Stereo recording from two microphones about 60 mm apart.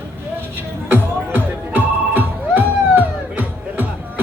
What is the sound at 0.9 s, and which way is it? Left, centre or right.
Music, right.